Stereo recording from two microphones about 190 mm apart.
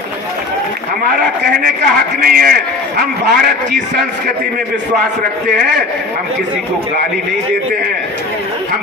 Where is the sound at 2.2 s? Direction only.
50° right (ahead or behind).